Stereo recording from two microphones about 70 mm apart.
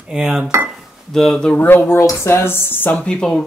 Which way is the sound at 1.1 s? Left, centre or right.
Centre.